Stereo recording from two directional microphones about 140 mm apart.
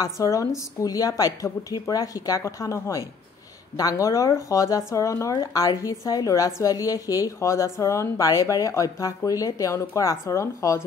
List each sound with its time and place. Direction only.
0.0 s a woman's voice: 25° left (ahead or behind)